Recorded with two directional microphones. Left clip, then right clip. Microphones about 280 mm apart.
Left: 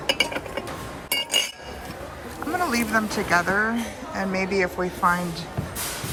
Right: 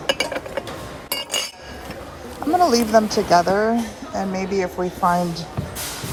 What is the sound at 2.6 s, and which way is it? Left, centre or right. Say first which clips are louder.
Speech: right 8 dB; centre.